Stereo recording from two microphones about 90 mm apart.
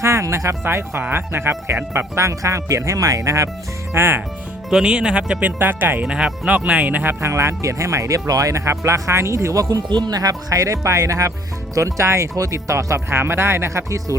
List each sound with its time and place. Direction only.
0.0 s speech: 30° right (ahead or behind)
4.7 s speech: 10° right (ahead or behind); by 14.2 s 35° right (ahead or behind)